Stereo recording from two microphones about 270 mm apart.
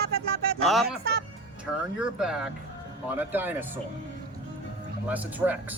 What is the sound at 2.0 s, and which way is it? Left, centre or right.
Speech, centre.